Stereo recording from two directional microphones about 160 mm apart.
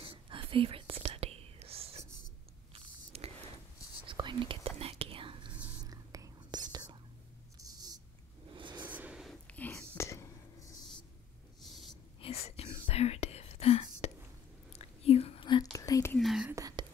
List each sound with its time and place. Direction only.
0.0 s whispering: 35° right (ahead or behind)
2.7 s biting: 40° right (ahead or behind)
4.1 s whispering: 30° right (ahead or behind)
8.5 s a sound: 30° right (ahead or behind)
8.8 s whispering: 10° right (ahead or behind); by 10.2 s 15° left (ahead or behind)
12.2 s whispering: 40° left (ahead or behind); by 16.2 s 20° left (ahead or behind)
16.2 s whispering: centre (ahead or behind)
16.5 s whispering: 20° right (ahead or behind)